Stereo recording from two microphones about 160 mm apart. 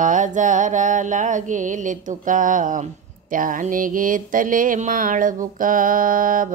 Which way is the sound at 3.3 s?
55° right (ahead or behind).